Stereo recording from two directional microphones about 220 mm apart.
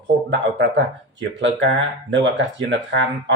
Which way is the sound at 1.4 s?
55° right (ahead or behind).